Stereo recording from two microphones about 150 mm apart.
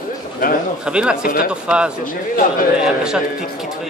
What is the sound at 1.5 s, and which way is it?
A man's voice, 5° right (ahead or behind).